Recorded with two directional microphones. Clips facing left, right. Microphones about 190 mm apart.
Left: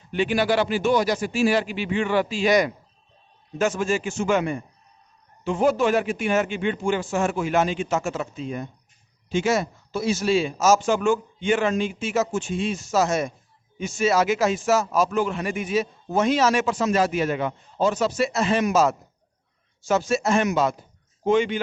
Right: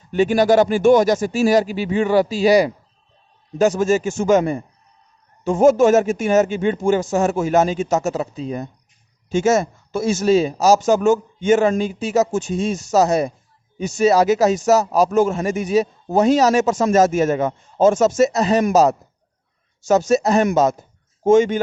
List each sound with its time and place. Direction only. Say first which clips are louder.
0.1 s speech: right 7 dB; 40° right (ahead or behind)